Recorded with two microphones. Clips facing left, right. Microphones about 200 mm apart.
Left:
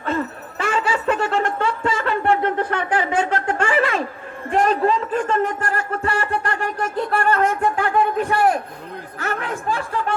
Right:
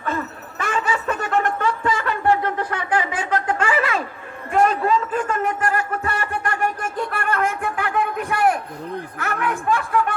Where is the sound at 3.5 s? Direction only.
35° left (ahead or behind).